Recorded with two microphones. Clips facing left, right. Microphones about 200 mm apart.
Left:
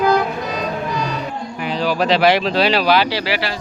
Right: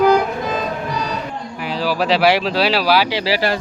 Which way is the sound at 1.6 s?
5° right (ahead or behind).